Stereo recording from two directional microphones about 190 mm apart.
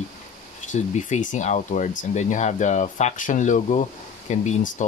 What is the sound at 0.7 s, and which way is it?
Speech, 40° left (ahead or behind).